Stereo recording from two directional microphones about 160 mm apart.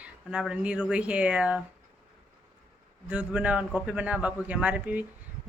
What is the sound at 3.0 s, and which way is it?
Speech, 10° right (ahead or behind).